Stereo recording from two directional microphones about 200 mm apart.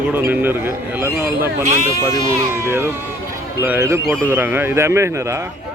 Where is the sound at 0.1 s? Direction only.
10° right (ahead or behind).